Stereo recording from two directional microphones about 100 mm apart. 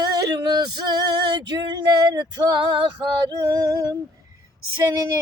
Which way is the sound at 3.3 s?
35° right (ahead or behind).